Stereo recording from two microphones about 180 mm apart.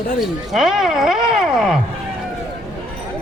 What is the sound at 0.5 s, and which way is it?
Speech, centre (ahead or behind).